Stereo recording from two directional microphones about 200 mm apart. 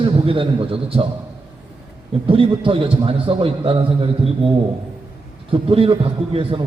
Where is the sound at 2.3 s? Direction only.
25° right (ahead or behind).